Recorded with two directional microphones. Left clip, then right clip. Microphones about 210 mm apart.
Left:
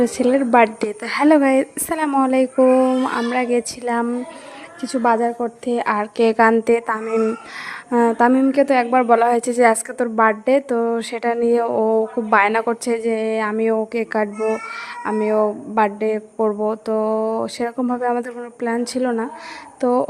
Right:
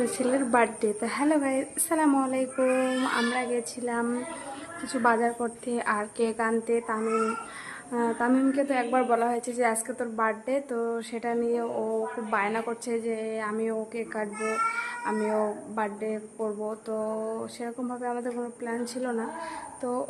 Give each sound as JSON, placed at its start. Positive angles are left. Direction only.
{"t": 0.0, "sound": "a woman's voice", "side_deg": 35}
{"t": 4.9, "sound": "a woman's voice", "side_deg": 25}